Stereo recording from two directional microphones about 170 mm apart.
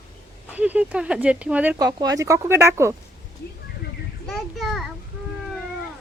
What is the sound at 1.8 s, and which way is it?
Speech, 20° right (ahead or behind).